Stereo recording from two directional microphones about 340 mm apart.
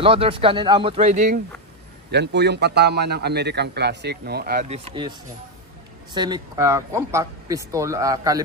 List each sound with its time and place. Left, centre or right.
0.0 s a man's voice: centre
6.1 s speech: centre